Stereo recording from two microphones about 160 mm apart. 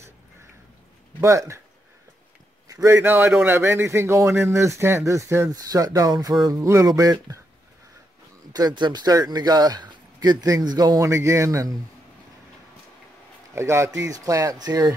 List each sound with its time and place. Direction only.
1.2 s speech: 20° right (ahead or behind)
2.7 s a man's voice: 15° right (ahead or behind)
8.5 s speech: 25° right (ahead or behind)
13.6 s speech: 15° right (ahead or behind)